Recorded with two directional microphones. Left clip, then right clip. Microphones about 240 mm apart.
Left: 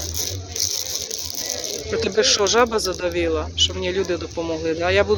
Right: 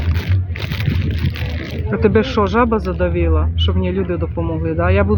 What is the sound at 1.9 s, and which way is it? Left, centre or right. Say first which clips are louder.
Speech: right 3 dB; centre.